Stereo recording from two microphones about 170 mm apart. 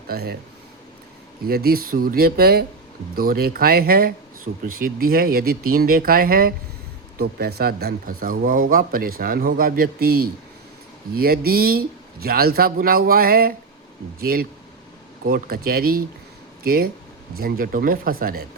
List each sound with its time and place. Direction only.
0.1 s speech: 65° right (ahead or behind)
1.5 s speech: 65° right (ahead or behind)